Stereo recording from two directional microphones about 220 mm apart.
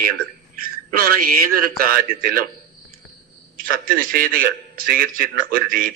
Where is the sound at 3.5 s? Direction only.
40° right (ahead or behind).